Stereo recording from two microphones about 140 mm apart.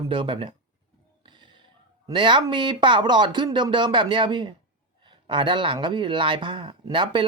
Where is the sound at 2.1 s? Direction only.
35° right (ahead or behind).